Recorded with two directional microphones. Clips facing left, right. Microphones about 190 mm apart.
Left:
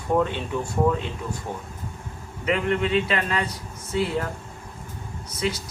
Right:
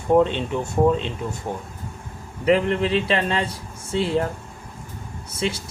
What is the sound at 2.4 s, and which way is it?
A man's voice, 35° right (ahead or behind).